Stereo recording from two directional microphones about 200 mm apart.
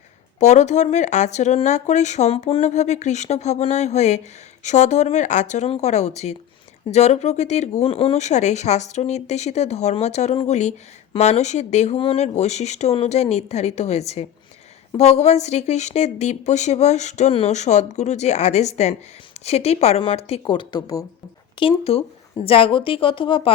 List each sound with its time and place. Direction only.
0.3 s speech: 35° left (ahead or behind)